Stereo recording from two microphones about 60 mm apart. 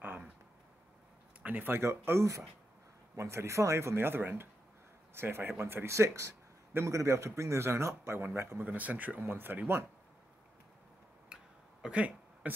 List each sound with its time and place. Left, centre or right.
0.0 s a sound: right
1.4 s speech: right
1.8 s a man's voice: right
8.2 s a man's voice: right
11.2 s a sound: centre
12.4 s speech: right